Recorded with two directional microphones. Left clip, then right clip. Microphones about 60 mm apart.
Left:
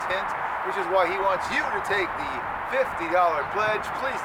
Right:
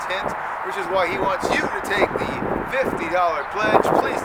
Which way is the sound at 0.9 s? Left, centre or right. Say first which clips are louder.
Right 2 dB; right.